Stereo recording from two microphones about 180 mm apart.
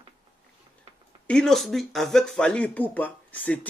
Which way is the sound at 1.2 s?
5° left (ahead or behind).